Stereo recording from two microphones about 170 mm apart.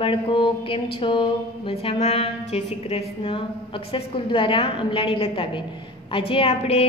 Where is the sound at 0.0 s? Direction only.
30° left (ahead or behind).